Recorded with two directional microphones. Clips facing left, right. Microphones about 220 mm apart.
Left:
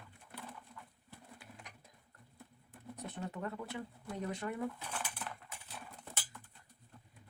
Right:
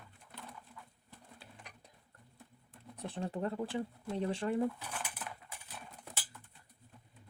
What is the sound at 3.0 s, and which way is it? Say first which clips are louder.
Speech: right 5 dB; 30° right (ahead or behind).